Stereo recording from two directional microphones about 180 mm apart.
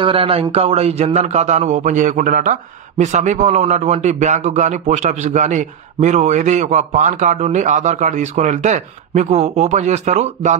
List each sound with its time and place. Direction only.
0.0 s a man's voice: 30° right (ahead or behind)